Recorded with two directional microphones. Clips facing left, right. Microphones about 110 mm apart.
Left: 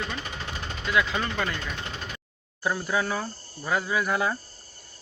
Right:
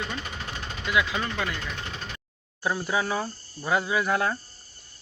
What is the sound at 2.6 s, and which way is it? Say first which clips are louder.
Speech: even; 5° right (ahead or behind).